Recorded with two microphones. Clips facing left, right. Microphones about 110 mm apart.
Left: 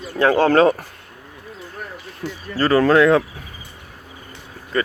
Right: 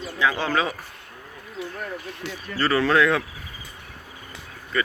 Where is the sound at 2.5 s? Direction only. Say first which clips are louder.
Left 6 dB; 40° left (ahead or behind).